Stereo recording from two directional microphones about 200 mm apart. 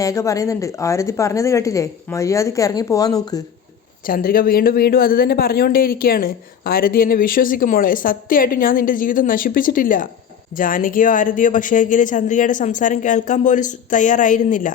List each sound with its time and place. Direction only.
0.0 s a woman's voice: 15° left (ahead or behind)
4.0 s speech: 45° left (ahead or behind)